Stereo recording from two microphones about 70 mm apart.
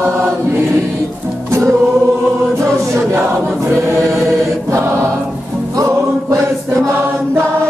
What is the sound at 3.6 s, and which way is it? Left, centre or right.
Choir, right.